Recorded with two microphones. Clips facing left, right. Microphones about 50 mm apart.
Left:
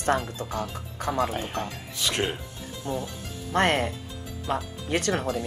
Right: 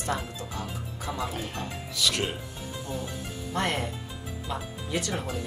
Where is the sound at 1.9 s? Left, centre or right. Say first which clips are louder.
Left 1 dB; left.